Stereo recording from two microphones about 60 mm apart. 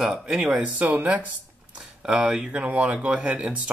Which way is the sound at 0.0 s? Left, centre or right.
Centre.